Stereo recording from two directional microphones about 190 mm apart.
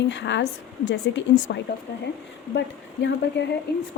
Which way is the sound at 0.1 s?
70° left (ahead or behind).